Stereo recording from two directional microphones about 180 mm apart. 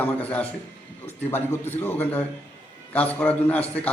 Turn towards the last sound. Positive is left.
turn(degrees=10)  # may be behind; listen again after turning